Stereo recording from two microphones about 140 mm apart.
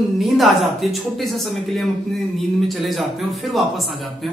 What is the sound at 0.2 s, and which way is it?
A man's voice, centre (ahead or behind).